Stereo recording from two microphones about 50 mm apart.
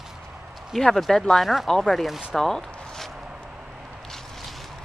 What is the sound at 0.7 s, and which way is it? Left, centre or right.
Speech, centre.